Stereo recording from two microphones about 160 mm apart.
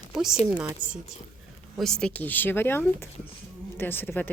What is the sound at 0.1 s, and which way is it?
A woman's voice, 5° right (ahead or behind).